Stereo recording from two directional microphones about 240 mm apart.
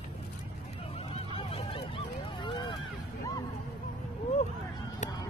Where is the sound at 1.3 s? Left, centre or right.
Left.